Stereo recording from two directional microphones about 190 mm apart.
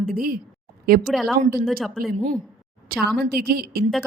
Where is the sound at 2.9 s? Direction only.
50° right (ahead or behind).